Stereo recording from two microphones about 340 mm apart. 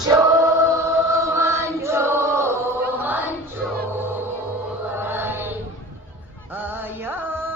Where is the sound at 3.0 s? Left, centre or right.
Centre.